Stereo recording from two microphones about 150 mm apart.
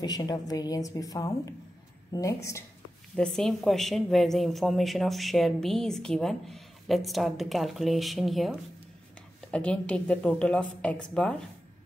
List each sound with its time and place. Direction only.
0.0 s a woman's voice: 25° left (ahead or behind)
3.2 s speech: 5° left (ahead or behind)